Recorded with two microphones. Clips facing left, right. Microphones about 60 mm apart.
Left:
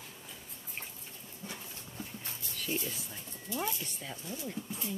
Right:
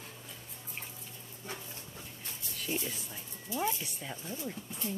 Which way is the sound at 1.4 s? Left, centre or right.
Left.